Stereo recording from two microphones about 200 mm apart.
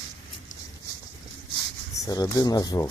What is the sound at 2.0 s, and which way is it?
Speech, 20° left (ahead or behind).